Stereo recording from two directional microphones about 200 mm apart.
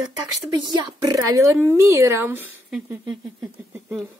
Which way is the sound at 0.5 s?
20° right (ahead or behind).